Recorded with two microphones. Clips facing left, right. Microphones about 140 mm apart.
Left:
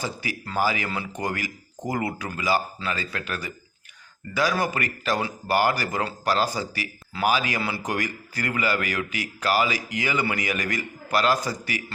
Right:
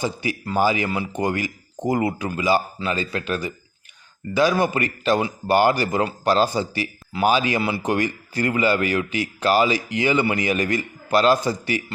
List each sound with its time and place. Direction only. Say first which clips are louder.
0.0 s speech: right 6 dB; 20° right (ahead or behind)